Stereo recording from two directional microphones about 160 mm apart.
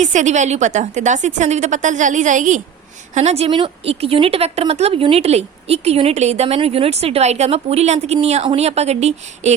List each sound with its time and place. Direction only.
0.0 s a woman's voice: 50° right (ahead or behind)
3.2 s speech: 40° right (ahead or behind)